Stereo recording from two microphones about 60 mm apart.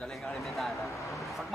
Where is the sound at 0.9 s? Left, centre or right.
Left.